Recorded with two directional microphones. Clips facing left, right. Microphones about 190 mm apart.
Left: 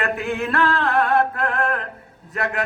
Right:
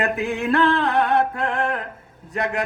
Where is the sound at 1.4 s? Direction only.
25° right (ahead or behind).